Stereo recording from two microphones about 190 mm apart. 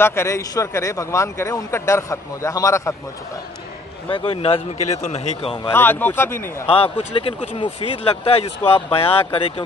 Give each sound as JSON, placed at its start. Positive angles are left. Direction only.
{"t": 0.0, "sound": "a man's voice", "side_deg": 15}
{"t": 4.1, "sound": "a man's voice", "side_deg": 30}
{"t": 5.7, "sound": "a man's voice", "side_deg": 10}
{"t": 6.7, "sound": "a man's voice", "side_deg": 30}